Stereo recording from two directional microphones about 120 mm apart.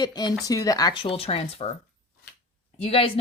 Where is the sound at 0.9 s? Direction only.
45° left (ahead or behind).